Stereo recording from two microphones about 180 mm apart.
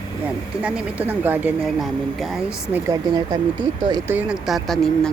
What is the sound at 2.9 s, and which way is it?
Speech, 25° right (ahead or behind).